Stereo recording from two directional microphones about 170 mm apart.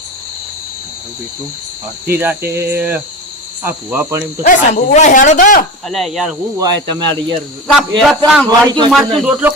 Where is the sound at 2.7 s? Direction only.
10° right (ahead or behind).